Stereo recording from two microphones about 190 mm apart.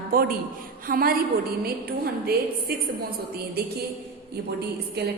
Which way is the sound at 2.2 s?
55° right (ahead or behind).